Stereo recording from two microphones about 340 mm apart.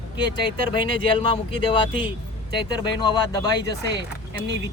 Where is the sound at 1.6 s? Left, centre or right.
Centre.